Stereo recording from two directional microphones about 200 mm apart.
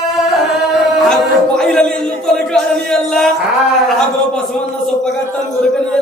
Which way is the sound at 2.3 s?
5° left (ahead or behind).